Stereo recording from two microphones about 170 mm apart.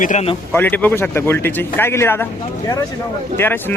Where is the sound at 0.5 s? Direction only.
10° left (ahead or behind).